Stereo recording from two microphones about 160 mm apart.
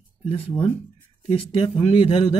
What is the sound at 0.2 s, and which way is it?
Speech, 35° left (ahead or behind).